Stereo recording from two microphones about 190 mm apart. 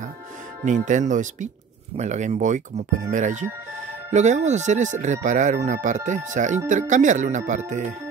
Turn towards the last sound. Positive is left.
turn(degrees=-40)  # may be behind; listen again after turning